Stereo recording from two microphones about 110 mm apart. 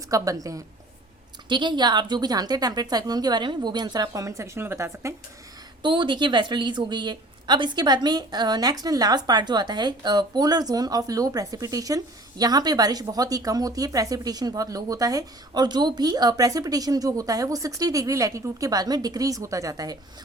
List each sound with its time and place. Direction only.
0.1 s a woman's voice: 30° right (ahead or behind)
1.5 s a woman's voice: 45° right (ahead or behind); by 5.1 s 25° right (ahead or behind)
5.8 s a woman's voice: 45° right (ahead or behind)